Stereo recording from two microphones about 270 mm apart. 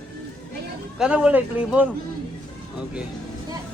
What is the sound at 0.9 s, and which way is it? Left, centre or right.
Speech, centre.